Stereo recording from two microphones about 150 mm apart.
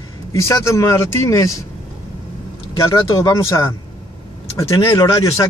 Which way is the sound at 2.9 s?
20° left (ahead or behind).